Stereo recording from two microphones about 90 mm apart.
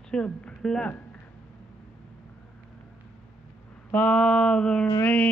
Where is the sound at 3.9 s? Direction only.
15° left (ahead or behind).